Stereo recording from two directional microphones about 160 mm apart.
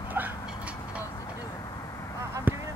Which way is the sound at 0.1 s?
10° right (ahead or behind).